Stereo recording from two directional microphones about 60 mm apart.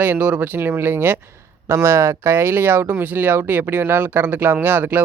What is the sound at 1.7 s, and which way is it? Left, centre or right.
Speech, right.